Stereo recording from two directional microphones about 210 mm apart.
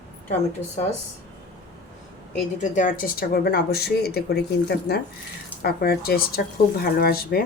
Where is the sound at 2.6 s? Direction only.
40° left (ahead or behind).